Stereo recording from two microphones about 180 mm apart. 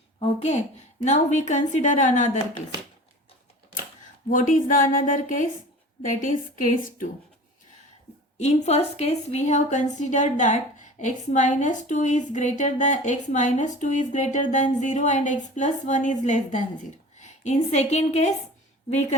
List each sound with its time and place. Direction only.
0.2 s a woman's voice: 35° left (ahead or behind)
4.3 s a woman's voice: 45° left (ahead or behind)
8.4 s a woman's voice: 35° left (ahead or behind)